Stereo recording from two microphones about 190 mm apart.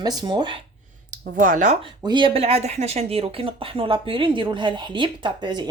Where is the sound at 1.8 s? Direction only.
25° right (ahead or behind).